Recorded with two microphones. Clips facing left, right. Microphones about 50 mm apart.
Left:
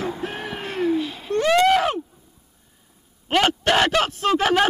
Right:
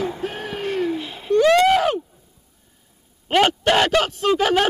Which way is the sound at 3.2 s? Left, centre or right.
Centre.